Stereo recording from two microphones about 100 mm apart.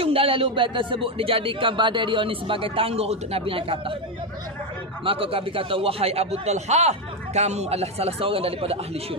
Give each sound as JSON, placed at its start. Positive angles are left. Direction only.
{"t": 0.0, "sound": "speech", "side_deg": -70}
{"t": 5.0, "sound": "a man's voice", "side_deg": -65}